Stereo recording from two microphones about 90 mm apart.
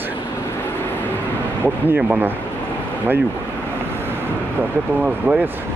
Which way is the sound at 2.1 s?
25° right (ahead or behind).